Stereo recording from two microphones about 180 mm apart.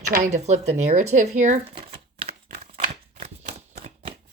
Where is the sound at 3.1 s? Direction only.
35° right (ahead or behind).